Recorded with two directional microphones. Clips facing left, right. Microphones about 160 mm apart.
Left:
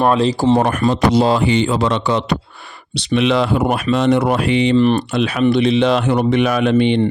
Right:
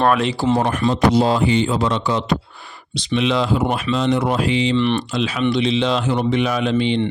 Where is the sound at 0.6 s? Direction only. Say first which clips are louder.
Left 2 dB; 55° left (ahead or behind).